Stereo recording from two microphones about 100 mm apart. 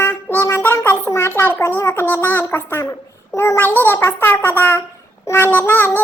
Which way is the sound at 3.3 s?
25° left (ahead or behind).